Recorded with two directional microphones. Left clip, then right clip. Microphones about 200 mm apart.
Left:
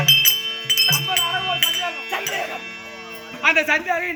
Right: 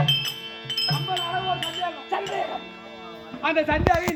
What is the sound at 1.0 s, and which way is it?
Music, 5° left (ahead or behind).